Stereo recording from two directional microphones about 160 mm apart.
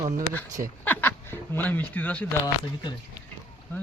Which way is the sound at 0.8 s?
10° left (ahead or behind).